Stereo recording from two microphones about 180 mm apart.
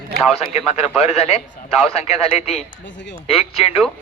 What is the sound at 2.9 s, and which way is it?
Speech, 80° left.